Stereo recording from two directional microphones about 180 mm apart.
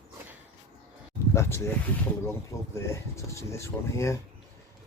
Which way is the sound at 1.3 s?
15° left (ahead or behind).